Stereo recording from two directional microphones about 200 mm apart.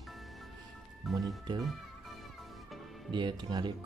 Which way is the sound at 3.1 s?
20° right (ahead or behind).